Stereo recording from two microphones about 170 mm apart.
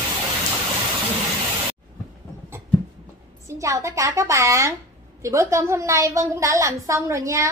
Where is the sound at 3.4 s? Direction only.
20° right (ahead or behind).